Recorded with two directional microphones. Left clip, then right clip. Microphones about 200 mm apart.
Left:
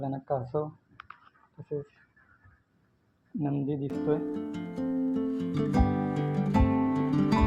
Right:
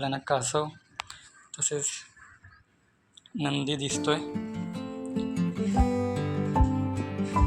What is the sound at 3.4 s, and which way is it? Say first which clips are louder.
Speech: right 2 dB; 5° right (ahead or behind).